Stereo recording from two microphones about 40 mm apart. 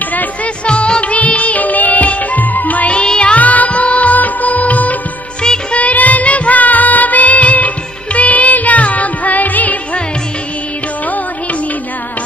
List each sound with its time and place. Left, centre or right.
0.7 s music: left
2.9 s music: left
3.3 s music: left